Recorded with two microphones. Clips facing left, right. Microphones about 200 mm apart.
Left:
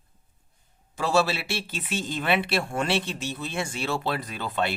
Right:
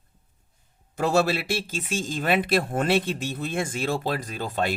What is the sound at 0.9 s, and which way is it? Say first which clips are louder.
Speech: right 2 dB; 60° right (ahead or behind).